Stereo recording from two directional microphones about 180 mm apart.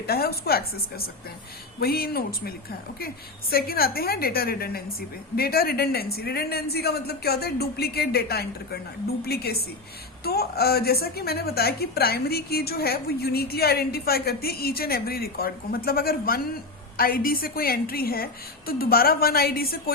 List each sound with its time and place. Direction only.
0.0 s a woman's voice: 60° left (ahead or behind)
3.5 s a woman's voice: 55° left (ahead or behind)